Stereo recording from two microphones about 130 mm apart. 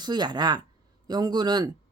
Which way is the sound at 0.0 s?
35° right (ahead or behind).